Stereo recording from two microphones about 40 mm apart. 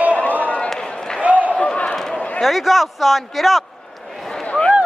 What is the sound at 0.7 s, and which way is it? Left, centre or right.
Basketball bounce, centre.